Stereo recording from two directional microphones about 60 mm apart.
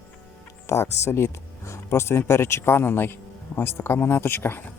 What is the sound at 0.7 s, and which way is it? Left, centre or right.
Speech, left.